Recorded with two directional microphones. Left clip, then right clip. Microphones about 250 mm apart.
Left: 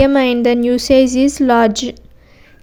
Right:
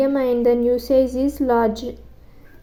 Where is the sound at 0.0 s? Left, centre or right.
Left.